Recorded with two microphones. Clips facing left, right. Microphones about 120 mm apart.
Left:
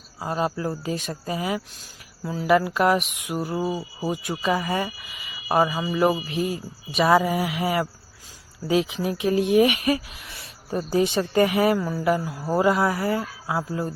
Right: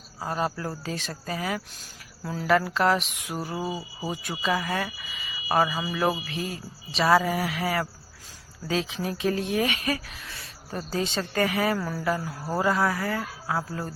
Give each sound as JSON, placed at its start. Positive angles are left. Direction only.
{"t": 0.2, "sound": "speech", "side_deg": 10}
{"t": 11.8, "sound": "speech", "side_deg": 5}
{"t": 12.0, "sound": "speech", "side_deg": 15}